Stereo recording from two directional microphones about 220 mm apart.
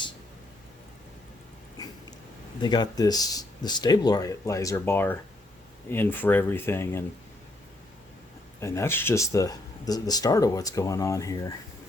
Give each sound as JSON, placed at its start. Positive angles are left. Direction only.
{"t": 2.6, "sound": "speech", "side_deg": 20}
{"t": 8.6, "sound": "speech", "side_deg": 10}